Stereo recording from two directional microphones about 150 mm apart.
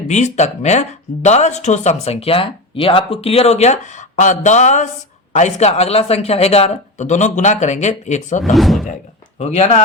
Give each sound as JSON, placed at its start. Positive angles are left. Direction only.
{"t": 0.1, "sound": "speech", "side_deg": 50}
{"t": 8.5, "sound": "speech", "side_deg": 0}
{"t": 9.4, "sound": "speech", "side_deg": 45}